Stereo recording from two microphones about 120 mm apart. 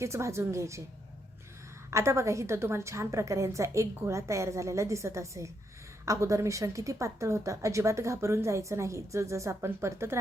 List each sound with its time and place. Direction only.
0.0 s speech: 25° right (ahead or behind)
1.9 s speech: 25° right (ahead or behind)